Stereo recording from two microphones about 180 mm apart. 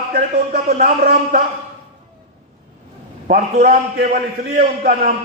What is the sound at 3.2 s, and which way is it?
Speech, 60° right (ahead or behind).